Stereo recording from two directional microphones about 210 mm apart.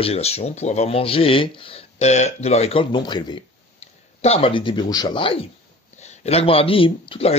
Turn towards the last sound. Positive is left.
turn(degrees=25)  # may be behind; listen again after turning